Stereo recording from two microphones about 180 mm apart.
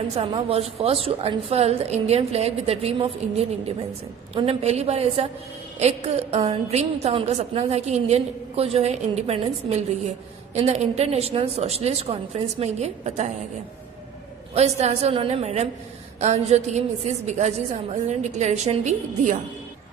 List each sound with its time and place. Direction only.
0.2 s a woman's voice: 35° right (ahead or behind)
14.5 s a woman's voice: 35° right (ahead or behind)